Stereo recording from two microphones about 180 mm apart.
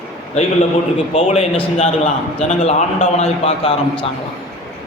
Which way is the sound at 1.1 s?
35° left (ahead or behind).